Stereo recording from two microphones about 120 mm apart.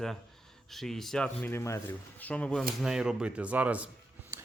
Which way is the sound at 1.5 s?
25° left (ahead or behind).